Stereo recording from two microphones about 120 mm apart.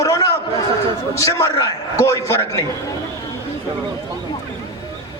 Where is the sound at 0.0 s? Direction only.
25° left (ahead or behind).